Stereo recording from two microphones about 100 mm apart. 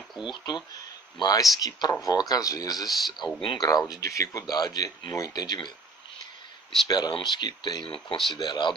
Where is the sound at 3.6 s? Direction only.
40° left (ahead or behind).